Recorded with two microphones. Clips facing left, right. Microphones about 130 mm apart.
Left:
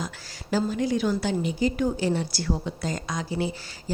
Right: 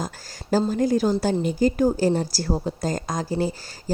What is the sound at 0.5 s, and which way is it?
Speech, 45° right (ahead or behind).